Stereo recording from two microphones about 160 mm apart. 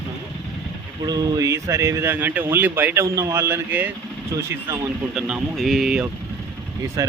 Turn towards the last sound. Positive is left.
turn(degrees=-5)  # may be behind; listen again after turning